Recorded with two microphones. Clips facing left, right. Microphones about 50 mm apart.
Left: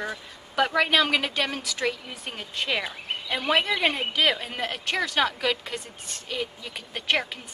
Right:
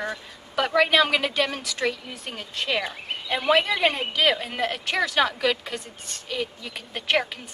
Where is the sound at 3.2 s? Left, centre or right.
Centre.